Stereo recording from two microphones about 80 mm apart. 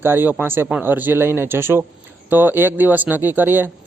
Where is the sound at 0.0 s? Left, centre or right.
Right.